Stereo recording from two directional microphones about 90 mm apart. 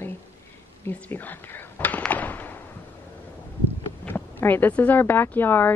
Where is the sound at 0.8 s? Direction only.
20° left (ahead or behind).